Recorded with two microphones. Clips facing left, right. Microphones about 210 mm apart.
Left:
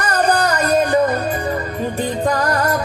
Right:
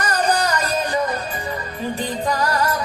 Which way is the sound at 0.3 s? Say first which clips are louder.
Left 5 dB; 55° left (ahead or behind).